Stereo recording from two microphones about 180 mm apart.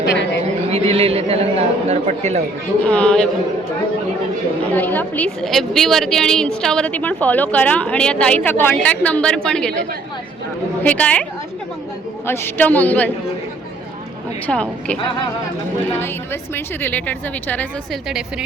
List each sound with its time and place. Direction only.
0.1 s a sound: 80° left
0.7 s a man's voice: 35° right (ahead or behind)
2.8 s a woman's voice: 5° left (ahead or behind)
4.7 s a woman's voice: 10° left (ahead or behind)
10.8 s a woman's voice: 10° left (ahead or behind)
14.4 s a woman's voice: 5° left (ahead or behind)
16.0 s a woman's voice: 15° left (ahead or behind)